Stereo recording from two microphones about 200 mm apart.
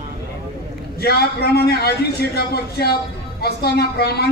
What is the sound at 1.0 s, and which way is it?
A man's voice, 50° left (ahead or behind).